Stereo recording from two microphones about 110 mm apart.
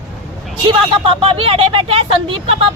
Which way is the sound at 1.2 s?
60° right (ahead or behind).